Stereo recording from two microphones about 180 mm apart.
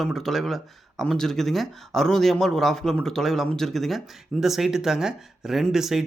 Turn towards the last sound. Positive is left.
turn(degrees=0)  # may be behind; listen again after turning